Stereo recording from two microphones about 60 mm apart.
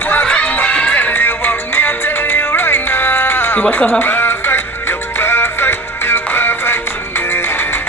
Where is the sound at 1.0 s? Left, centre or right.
Left.